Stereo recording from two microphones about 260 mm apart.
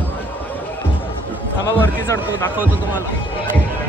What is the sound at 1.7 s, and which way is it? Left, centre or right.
Speech, centre.